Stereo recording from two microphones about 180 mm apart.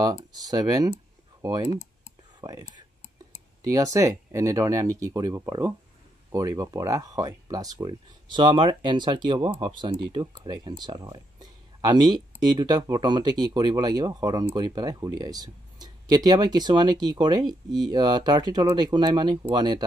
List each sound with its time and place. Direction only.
0.0 s speech: 20° right (ahead or behind)